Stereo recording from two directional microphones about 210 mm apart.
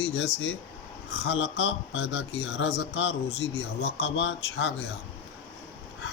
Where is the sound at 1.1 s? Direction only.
55° left (ahead or behind).